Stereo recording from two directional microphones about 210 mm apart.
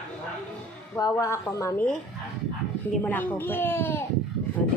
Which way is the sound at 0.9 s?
15° left (ahead or behind).